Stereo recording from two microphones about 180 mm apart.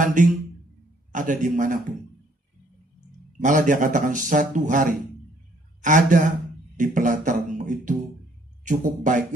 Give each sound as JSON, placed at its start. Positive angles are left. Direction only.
{"t": 0.0, "sound": "a man's voice", "side_deg": -45}
{"t": 3.3, "sound": "a man's voice", "side_deg": -45}
{"t": 6.8, "sound": "music", "side_deg": -45}
{"t": 8.6, "sound": "speech", "side_deg": -45}